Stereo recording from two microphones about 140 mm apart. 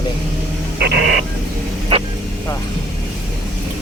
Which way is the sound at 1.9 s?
45° right (ahead or behind).